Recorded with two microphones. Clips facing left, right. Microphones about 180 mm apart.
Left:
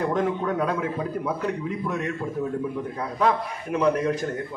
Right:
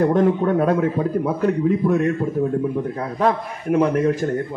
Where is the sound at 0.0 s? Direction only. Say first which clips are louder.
Right 7 dB; 45° right (ahead or behind).